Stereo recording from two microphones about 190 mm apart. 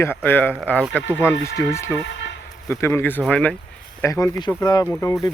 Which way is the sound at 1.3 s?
65° left (ahead or behind).